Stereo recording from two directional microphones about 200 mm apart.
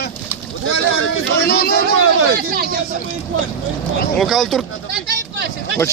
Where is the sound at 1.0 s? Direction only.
55° left (ahead or behind).